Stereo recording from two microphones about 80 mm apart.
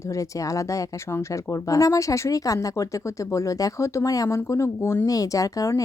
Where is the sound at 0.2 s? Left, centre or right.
Left.